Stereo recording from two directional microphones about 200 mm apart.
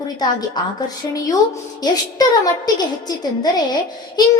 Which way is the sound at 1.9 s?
20° left (ahead or behind).